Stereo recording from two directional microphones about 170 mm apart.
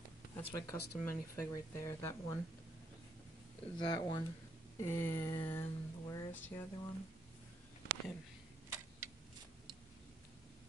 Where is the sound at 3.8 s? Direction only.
25° left (ahead or behind).